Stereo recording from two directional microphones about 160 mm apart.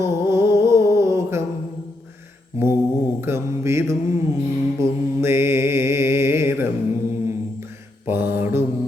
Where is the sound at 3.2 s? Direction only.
15° right (ahead or behind).